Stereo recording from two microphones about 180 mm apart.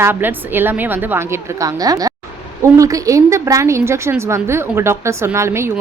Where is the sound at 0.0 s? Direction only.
10° right (ahead or behind).